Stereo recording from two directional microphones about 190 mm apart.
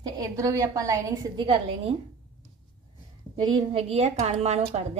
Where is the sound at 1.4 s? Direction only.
30° right (ahead or behind).